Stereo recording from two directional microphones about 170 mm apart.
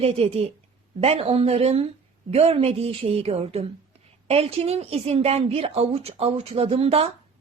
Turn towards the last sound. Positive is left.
turn(degrees=-35)  # may be behind; listen again after turning